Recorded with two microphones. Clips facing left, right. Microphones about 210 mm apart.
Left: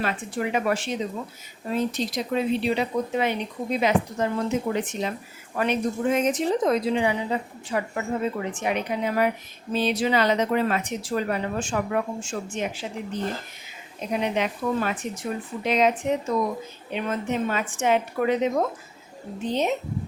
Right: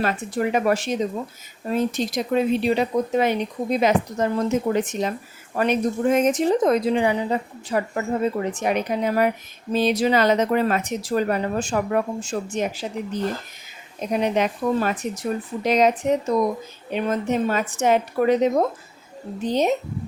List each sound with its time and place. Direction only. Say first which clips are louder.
0.0 s a woman's voice: right 4 dB; 45° right (ahead or behind)
14.1 s speech: right 4 dB; 45° right (ahead or behind)